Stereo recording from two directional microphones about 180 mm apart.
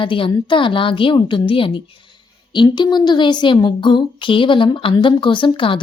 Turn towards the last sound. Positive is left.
turn(degrees=30)  # may be behind; listen again after turning